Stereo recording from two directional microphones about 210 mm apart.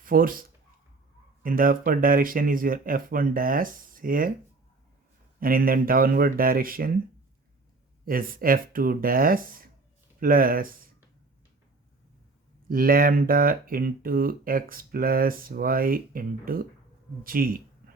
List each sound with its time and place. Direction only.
0.0 s speech: 40° right (ahead or behind)
1.5 s speech: 40° right (ahead or behind)
5.4 s speech: 45° right (ahead or behind)
8.0 s speech: 45° right (ahead or behind)
12.6 s speech: 45° right (ahead or behind)